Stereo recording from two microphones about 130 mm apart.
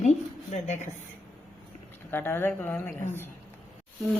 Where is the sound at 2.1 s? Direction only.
15° left (ahead or behind).